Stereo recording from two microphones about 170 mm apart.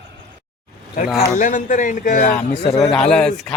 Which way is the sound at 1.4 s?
50° left (ahead or behind).